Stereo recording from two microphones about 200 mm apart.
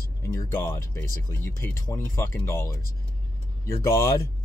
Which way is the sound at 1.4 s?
10° left (ahead or behind).